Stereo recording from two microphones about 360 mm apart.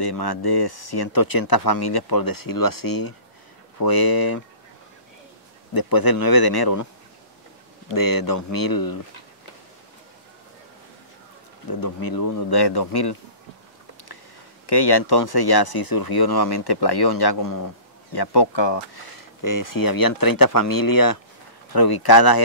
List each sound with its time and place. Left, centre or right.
0.0 s speech: left
5.7 s speech: left
7.9 s speech: left
11.8 s speech: left
14.7 s speech: left
18.1 s speech: left
19.4 s speech: left
21.7 s speech: left